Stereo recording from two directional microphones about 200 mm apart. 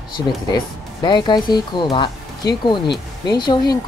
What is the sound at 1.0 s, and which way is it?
Speech, 20° left (ahead or behind).